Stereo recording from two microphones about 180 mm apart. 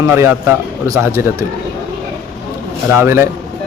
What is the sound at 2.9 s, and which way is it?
Speech, 15° right (ahead or behind).